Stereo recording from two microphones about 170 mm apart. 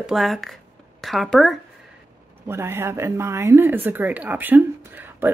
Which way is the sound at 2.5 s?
15° right (ahead or behind).